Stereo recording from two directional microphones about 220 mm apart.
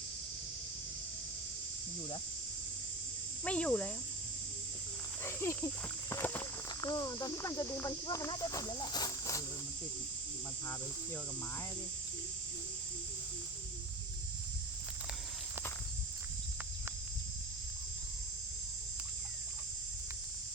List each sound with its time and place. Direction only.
3.4 s speech: 5° left (ahead or behind)
5.2 s speech: 10° left (ahead or behind)